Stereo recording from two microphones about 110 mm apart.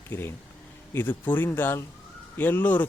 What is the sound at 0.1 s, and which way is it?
Speech, 20° left (ahead or behind).